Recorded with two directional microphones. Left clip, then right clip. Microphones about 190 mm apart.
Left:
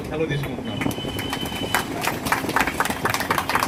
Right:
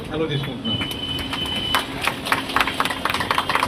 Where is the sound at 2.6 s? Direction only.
50° left (ahead or behind).